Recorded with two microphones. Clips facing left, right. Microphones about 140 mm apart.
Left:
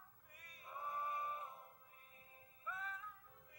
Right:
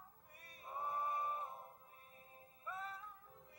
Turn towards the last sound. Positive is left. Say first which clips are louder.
# right 2 dB
turn(degrees=-35)  # may be behind; listen again after turning